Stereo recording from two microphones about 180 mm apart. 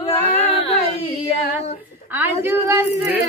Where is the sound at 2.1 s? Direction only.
10° right (ahead or behind).